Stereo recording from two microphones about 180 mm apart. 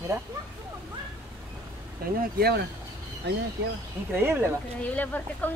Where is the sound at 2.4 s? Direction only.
65° right (ahead or behind).